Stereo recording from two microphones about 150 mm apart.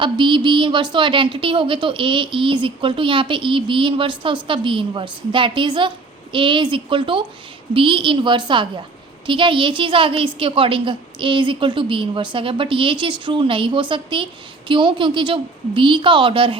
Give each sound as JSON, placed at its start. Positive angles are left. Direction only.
{"t": 0.0, "sound": "a woman's voice", "side_deg": -35}